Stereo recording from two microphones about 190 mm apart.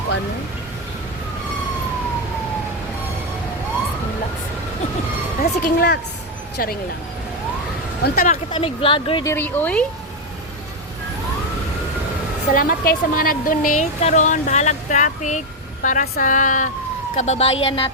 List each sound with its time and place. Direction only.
5.4 s a woman's voice: 55° left (ahead or behind)
8.0 s a woman's voice: 50° left (ahead or behind)
8.5 s a woman's voice: 30° left (ahead or behind)
9.3 s speech: 10° left (ahead or behind)
12.5 s a woman's voice: 50° left (ahead or behind); by 17.9 s 30° left (ahead or behind)